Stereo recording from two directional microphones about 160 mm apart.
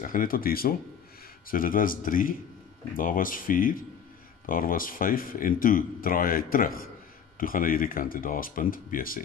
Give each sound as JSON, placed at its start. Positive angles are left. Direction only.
{"t": 0.0, "sound": "speech", "side_deg": 60}